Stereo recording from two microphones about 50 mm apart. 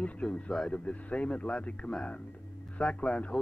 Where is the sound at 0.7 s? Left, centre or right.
Left.